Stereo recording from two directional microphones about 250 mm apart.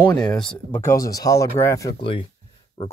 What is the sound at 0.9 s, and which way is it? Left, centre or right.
Speech, centre.